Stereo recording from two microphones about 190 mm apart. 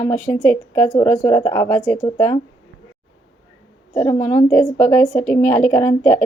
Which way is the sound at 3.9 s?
10° left (ahead or behind).